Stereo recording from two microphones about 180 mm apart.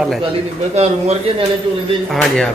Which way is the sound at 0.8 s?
35° right (ahead or behind).